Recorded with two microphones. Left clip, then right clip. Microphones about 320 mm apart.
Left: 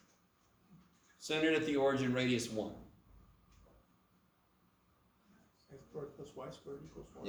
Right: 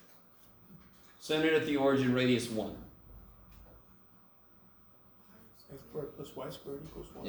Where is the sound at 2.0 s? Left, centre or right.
Left.